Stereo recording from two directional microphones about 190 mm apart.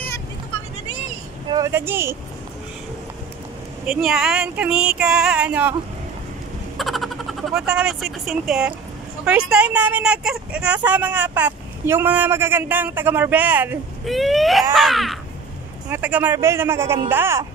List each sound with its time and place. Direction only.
1.5 s speech: 15° right (ahead or behind)
3.8 s female singing: 5° right (ahead or behind)
6.8 s speech: centre (ahead or behind)
14.0 s female singing: centre (ahead or behind)
15.9 s speech: 10° right (ahead or behind)